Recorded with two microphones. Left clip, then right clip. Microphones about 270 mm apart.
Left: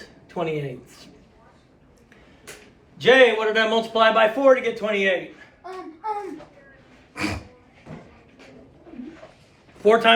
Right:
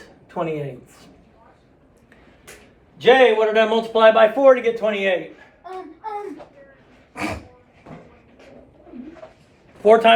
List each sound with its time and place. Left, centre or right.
0.3 s speech: centre
3.0 s speech: right
7.1 s a sound: right
9.8 s speech: right